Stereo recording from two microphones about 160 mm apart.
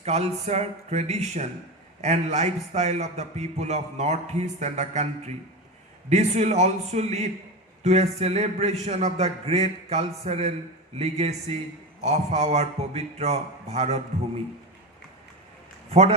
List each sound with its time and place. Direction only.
0.0 s a man's voice: 40° right (ahead or behind)
15.9 s speech: 40° right (ahead or behind)